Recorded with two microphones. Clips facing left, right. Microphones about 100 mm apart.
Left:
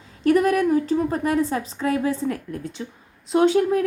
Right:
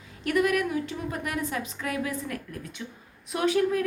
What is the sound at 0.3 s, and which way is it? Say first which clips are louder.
A woman's voice: left 7 dB; 35° left (ahead or behind).